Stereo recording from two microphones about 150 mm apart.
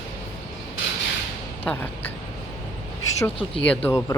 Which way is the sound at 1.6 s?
15° left (ahead or behind).